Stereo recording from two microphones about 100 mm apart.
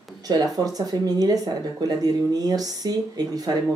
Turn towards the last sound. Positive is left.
turn(degrees=-40)  # may be behind; listen again after turning